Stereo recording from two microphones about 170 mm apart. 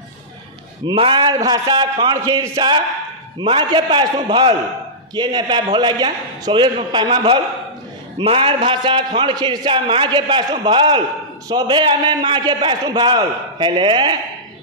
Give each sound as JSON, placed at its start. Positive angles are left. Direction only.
{"t": 0.8, "sound": "a man's voice", "side_deg": -30}